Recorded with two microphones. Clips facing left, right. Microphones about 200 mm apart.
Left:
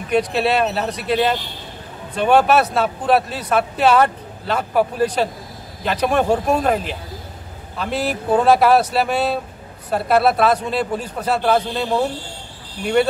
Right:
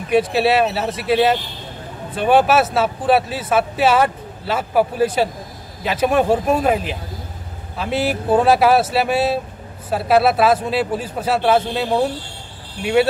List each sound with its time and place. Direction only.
0.1 s speech: 5° right (ahead or behind)